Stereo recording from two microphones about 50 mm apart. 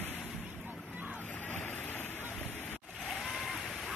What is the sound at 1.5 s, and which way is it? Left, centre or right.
Vehicle, left.